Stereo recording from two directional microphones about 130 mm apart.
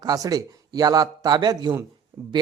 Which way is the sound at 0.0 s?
30° right (ahead or behind).